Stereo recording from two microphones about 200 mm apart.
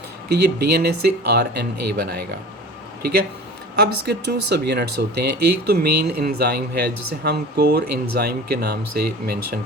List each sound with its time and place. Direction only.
0.3 s speech: 55° right (ahead or behind)
3.8 s speech: 55° right (ahead or behind)